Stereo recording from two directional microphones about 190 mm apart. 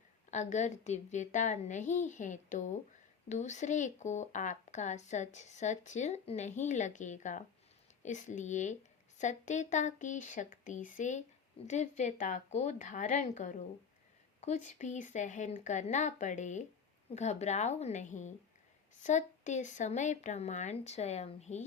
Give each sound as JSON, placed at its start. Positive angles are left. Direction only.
{"t": 0.3, "sound": "speech", "side_deg": 40}